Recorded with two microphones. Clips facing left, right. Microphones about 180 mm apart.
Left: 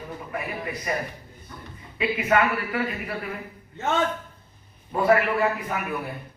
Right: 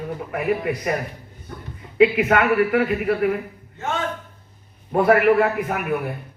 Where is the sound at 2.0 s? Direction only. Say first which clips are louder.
Right 6 dB; 65° right (ahead or behind).